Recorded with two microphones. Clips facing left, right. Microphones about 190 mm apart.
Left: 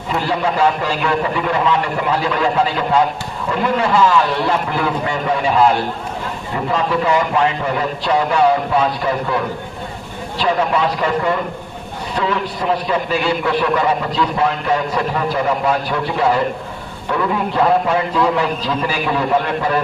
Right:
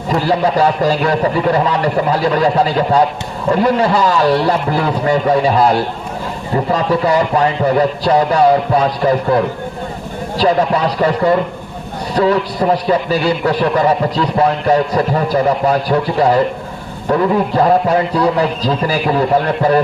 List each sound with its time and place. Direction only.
0.1 s a man's voice: 40° right (ahead or behind)